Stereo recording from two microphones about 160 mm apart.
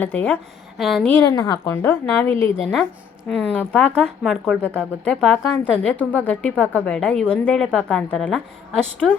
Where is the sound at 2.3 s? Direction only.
35° right (ahead or behind).